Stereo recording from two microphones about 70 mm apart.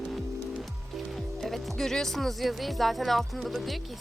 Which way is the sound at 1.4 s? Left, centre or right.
Centre.